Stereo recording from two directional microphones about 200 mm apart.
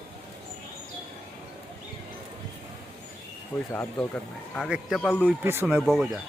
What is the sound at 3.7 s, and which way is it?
Speech, 10° left (ahead or behind).